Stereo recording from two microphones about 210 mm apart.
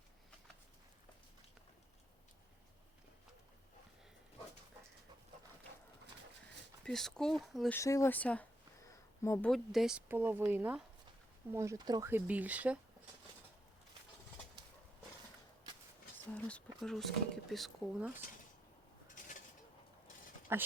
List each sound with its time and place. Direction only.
6.8 s speech: centre (ahead or behind)
7.8 s speech: 15° left (ahead or behind)
8.9 s a sound: 15° left (ahead or behind)
9.5 s speech: centre (ahead or behind)
16.3 s speech: 5° left (ahead or behind)
19.2 s cutlery: 40° left (ahead or behind)
20.5 s speech: 10° right (ahead or behind)